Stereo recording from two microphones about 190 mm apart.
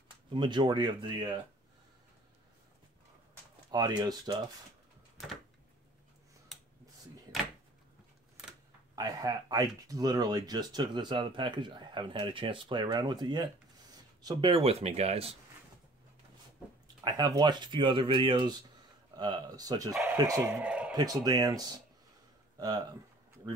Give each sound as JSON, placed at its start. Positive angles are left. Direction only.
{"t": 0.3, "sound": "speech", "side_deg": -25}
{"t": 3.7, "sound": "speech", "side_deg": -20}
{"t": 8.9, "sound": "speech", "side_deg": -20}
{"t": 16.8, "sound": "speech", "side_deg": -20}
{"t": 19.9, "sound": "speech", "side_deg": -10}
{"t": 20.9, "sound": "speech", "side_deg": -20}